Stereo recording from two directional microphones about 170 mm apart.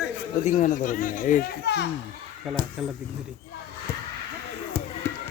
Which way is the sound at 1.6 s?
85° left.